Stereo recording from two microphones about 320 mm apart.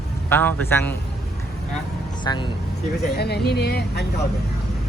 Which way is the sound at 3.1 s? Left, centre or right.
Left.